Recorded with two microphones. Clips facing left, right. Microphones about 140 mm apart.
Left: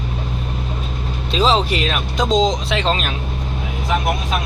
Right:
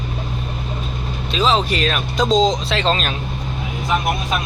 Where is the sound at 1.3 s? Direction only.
30° left (ahead or behind).